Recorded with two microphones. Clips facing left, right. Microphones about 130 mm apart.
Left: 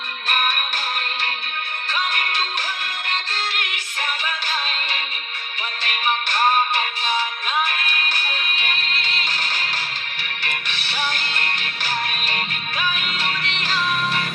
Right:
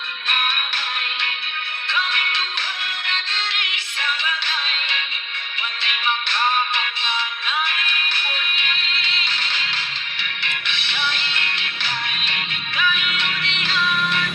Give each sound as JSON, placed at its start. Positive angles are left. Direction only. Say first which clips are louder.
{"t": 0.3, "sound": "music", "louder": "left 3 dB", "side_deg": 45}
{"t": 1.9, "sound": "music", "louder": "even", "side_deg": 45}